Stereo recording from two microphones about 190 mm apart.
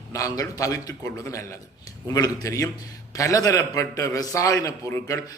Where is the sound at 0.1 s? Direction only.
15° left (ahead or behind).